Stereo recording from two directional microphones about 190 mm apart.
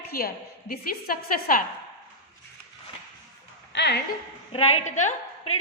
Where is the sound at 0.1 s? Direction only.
50° left (ahead or behind).